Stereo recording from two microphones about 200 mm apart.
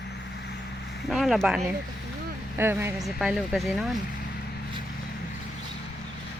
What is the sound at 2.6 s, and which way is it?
Speech, 10° right (ahead or behind).